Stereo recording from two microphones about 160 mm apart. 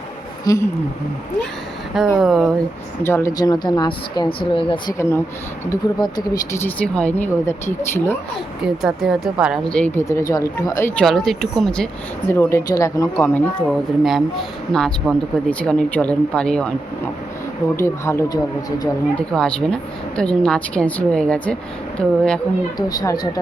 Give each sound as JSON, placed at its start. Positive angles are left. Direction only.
{"t": 0.4, "sound": "a woman's voice", "side_deg": 20}
{"t": 2.0, "sound": "a woman's voice", "side_deg": 0}
{"t": 3.0, "sound": "a woman's voice", "side_deg": 15}
{"t": 4.9, "sound": "speech", "side_deg": 15}
{"t": 8.6, "sound": "a woman's voice", "side_deg": 0}
{"t": 9.7, "sound": "speech", "side_deg": 10}
{"t": 11.0, "sound": "a woman's voice", "side_deg": 0}
{"t": 12.3, "sound": "speech", "side_deg": 15}
{"t": 14.0, "sound": "a woman's voice", "side_deg": 0}
{"t": 17.7, "sound": "speech", "side_deg": 15}
{"t": 19.1, "sound": "a woman's voice", "side_deg": 5}
{"t": 22.9, "sound": "a woman's voice", "side_deg": 25}